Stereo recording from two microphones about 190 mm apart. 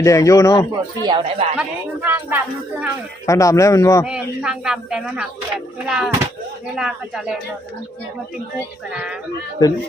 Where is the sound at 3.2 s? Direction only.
15° left (ahead or behind).